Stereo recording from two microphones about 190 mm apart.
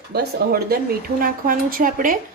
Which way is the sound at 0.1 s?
55° right (ahead or behind).